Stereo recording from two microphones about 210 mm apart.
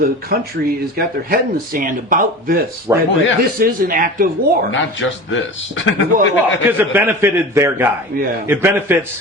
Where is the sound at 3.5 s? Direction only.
45° right (ahead or behind).